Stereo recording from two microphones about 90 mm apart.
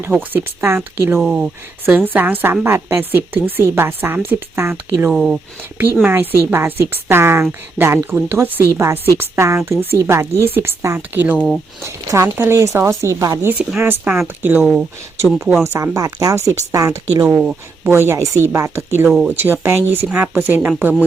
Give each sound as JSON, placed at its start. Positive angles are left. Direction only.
{"t": 0.0, "sound": "speech", "side_deg": -25}
{"t": 1.2, "sound": "speech", "side_deg": -10}
{"t": 2.0, "sound": "speech", "side_deg": -20}
{"t": 5.1, "sound": "speech", "side_deg": -5}
{"t": 6.1, "sound": "speech", "side_deg": -25}
{"t": 11.3, "sound": "speech", "side_deg": 5}
{"t": 11.8, "sound": "speech", "side_deg": -30}
{"t": 17.2, "sound": "speech", "side_deg": -15}
{"t": 17.9, "sound": "speech", "side_deg": -30}